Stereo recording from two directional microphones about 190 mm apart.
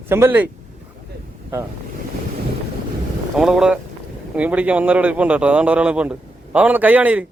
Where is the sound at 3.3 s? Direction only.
5° right (ahead or behind).